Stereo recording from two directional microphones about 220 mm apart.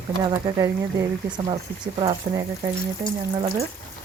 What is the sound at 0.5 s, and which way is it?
Speech, 15° right (ahead or behind).